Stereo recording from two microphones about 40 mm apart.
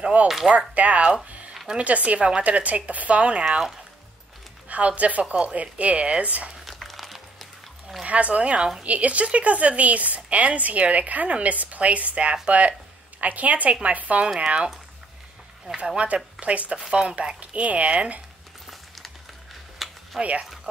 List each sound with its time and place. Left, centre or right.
0.0 s a woman's voice: right
3.4 s speech: centre
4.6 s a woman's voice: right
6.5 s crumpling: centre
8.1 s a woman's voice: right
16.3 s speech: right
17.4 s a woman's voice: right
19.8 s a sound: centre
20.2 s a woman's voice: right